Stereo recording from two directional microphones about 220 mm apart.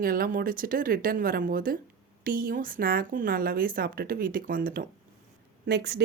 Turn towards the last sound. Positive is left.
turn(degrees=-50)  # may be behind; listen again after turning